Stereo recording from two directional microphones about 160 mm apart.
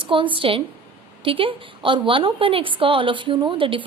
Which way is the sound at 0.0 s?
30° right (ahead or behind).